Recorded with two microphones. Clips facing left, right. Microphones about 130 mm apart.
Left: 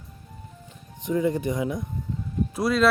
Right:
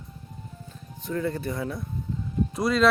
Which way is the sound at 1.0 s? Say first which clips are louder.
Left 5 dB; 15° left (ahead or behind).